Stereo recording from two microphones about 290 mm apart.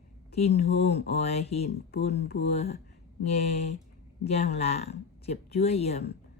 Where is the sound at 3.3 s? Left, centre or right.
Left.